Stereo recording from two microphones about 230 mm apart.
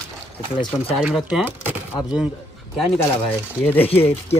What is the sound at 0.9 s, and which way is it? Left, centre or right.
Speech, centre.